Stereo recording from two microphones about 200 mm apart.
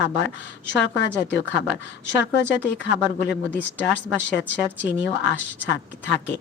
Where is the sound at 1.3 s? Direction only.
60° left (ahead or behind).